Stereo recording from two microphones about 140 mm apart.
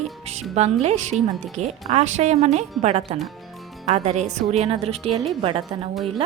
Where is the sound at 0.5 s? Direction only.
50° right (ahead or behind).